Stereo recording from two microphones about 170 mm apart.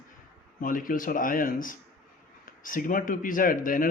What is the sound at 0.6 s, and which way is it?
Speech, 55° left (ahead or behind).